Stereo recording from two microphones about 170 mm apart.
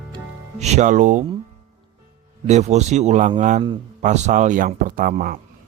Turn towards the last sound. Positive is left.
turn(degrees=-55)  # may be behind; listen again after turning